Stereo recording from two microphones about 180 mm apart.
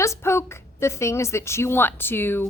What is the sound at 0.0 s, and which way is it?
A woman's voice, 15° left (ahead or behind).